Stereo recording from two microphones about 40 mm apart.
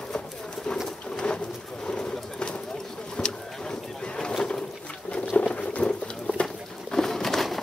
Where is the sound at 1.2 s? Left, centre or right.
Left.